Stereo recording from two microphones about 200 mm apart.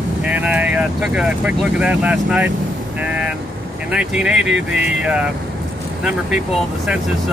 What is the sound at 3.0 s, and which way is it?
Vehicle, 5° right (ahead or behind).